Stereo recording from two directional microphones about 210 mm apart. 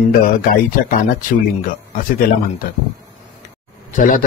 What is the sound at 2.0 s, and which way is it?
Speech, 40° left (ahead or behind).